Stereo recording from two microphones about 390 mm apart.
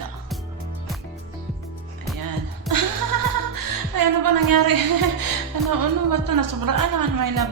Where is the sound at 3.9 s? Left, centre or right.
Right.